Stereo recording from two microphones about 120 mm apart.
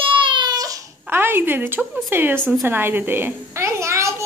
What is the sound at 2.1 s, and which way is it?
Speech, 15° right (ahead or behind).